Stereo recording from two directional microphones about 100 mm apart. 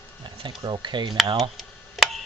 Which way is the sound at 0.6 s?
50° right (ahead or behind).